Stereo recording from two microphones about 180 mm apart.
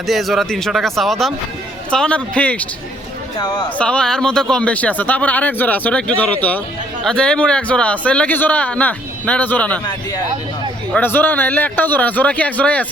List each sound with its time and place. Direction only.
0.1 s speech: centre (ahead or behind)
3.3 s speech: 20° left (ahead or behind)
3.8 s speech: 5° left (ahead or behind)
10.9 s speech: 10° left (ahead or behind)